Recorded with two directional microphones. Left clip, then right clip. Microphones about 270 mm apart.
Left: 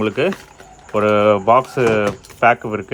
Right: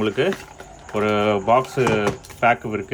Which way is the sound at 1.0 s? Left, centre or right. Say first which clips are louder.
Left 6 dB; centre.